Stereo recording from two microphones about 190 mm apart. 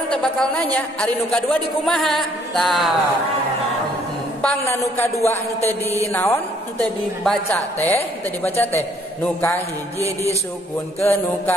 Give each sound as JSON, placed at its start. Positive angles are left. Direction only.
{"t": 0.1, "sound": "a woman's voice", "side_deg": 5}
{"t": 4.4, "sound": "a man's voice", "side_deg": 5}
{"t": 6.1, "sound": "a man's voice", "side_deg": 15}
{"t": 7.2, "sound": "a woman's voice", "side_deg": 5}
{"t": 11.0, "sound": "a man's voice", "side_deg": 10}